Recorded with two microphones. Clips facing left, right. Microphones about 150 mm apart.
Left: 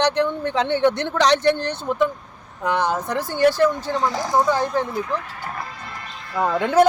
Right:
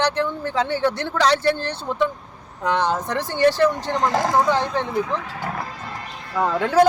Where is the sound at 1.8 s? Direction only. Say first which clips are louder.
Left 1 dB; 5° left (ahead or behind).